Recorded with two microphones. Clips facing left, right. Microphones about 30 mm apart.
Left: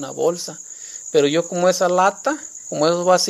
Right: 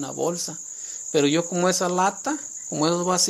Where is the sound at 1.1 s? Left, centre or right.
Centre.